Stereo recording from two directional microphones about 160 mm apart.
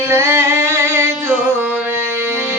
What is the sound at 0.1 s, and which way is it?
Music, 15° right (ahead or behind).